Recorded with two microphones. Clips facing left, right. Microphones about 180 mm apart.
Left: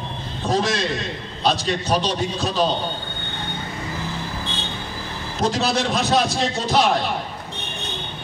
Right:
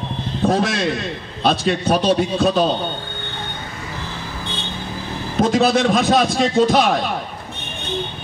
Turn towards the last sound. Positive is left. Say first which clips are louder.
# right 5 dB
turn(degrees=-55)  # may be behind; listen again after turning